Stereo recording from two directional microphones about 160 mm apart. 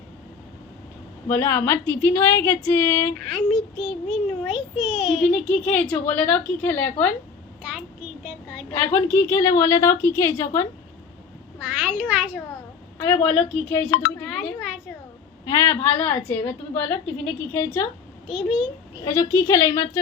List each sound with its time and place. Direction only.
1.3 s a woman's voice: 15° left (ahead or behind)
3.2 s a child's voice: centre (ahead or behind)
7.6 s a sound: 5° right (ahead or behind)
8.7 s a woman's voice: 15° left (ahead or behind)
11.7 s a child's voice: 10° right (ahead or behind)
13.0 s a woman's voice: 30° left (ahead or behind)
14.3 s chink: centre (ahead or behind)
15.4 s a woman's voice: 20° left (ahead or behind)
18.3 s a child's voice: 5° right (ahead or behind)
19.0 s a woman's voice: 20° left (ahead or behind)